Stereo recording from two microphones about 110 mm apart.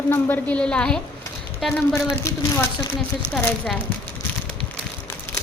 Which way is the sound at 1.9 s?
25° left (ahead or behind).